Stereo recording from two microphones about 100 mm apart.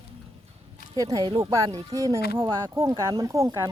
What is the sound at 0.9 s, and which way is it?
Speech, 40° right (ahead or behind).